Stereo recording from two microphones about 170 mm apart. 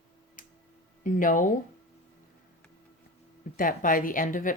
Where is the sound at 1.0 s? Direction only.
50° left (ahead or behind).